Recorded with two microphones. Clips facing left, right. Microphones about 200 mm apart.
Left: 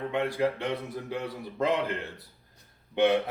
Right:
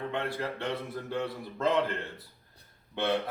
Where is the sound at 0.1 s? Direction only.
15° left (ahead or behind).